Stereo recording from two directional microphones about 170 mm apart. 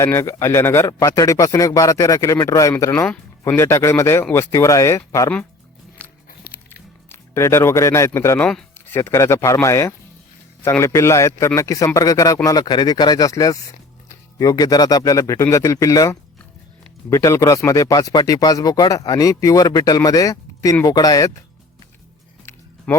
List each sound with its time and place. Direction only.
0.0 s speech: 15° left (ahead or behind)
6.5 s biting: 65° left (ahead or behind)
7.1 s speech: 15° left (ahead or behind)
22.9 s speech: 5° left (ahead or behind)